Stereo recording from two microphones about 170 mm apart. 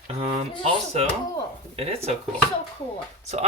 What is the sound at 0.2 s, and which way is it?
Speech, 35° right (ahead or behind).